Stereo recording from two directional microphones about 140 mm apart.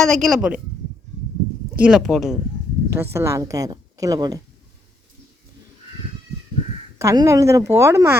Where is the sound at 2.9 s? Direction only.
20° right (ahead or behind).